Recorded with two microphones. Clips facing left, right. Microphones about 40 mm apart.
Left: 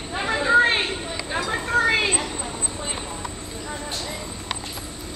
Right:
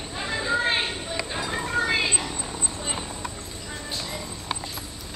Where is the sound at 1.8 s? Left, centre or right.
Left.